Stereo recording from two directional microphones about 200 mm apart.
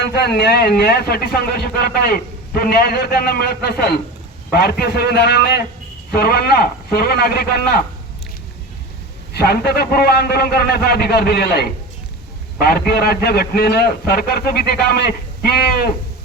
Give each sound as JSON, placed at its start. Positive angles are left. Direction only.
{"t": 0.1, "sound": "a man's voice", "side_deg": 55}
{"t": 9.3, "sound": "a man's voice", "side_deg": 50}